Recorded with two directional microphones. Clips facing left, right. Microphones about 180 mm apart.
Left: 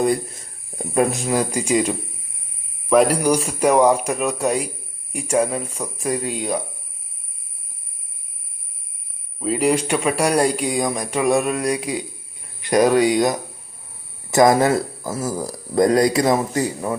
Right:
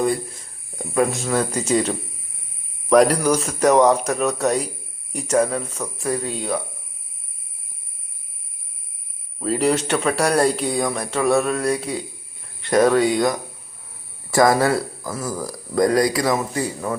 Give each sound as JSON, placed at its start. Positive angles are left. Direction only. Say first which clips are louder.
{"t": 0.8, "sound": "speech", "louder": "left 1 dB", "side_deg": 20}
{"t": 3.2, "sound": "speech", "louder": "left 1 dB", "side_deg": 15}
{"t": 9.4, "sound": "speech", "louder": "left 1 dB", "side_deg": 5}